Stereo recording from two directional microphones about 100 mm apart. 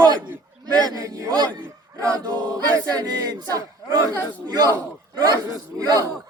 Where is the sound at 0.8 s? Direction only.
35° right (ahead or behind).